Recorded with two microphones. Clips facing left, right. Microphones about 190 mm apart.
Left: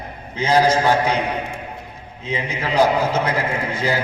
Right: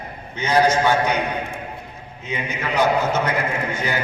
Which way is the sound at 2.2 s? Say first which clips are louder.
Left 2 dB; 30° left (ahead or behind).